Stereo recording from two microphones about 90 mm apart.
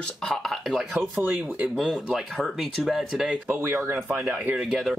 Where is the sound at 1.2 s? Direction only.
20° right (ahead or behind).